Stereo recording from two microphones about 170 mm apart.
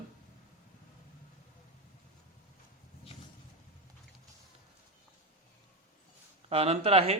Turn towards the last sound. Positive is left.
turn(degrees=-35)  # may be behind; listen again after turning